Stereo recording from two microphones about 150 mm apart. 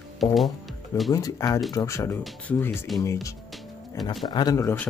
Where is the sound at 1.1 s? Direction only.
25° left (ahead or behind).